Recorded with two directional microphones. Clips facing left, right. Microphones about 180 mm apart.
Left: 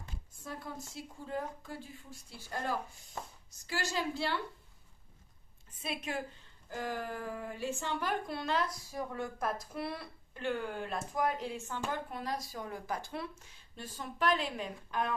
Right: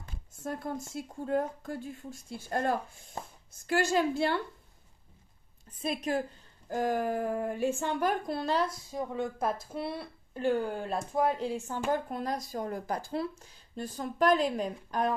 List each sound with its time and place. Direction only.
0.4 s speech: 50° right (ahead or behind)
5.8 s a woman's voice: 40° right (ahead or behind)
10.3 s a woman's voice: 40° right (ahead or behind)